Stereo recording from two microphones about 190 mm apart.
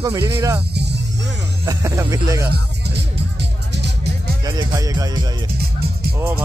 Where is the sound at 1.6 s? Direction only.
15° right (ahead or behind).